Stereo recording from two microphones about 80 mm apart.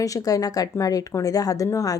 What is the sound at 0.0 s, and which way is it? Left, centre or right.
A woman's voice, left.